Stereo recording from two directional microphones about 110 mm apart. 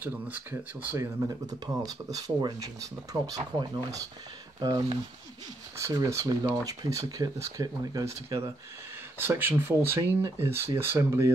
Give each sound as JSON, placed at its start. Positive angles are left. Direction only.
{"t": 0.0, "sound": "speech", "side_deg": -15}
{"t": 1.9, "sound": "speech", "side_deg": -35}
{"t": 5.8, "sound": "speech", "side_deg": -30}